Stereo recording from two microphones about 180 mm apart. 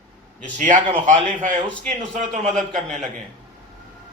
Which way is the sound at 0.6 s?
45° right (ahead or behind).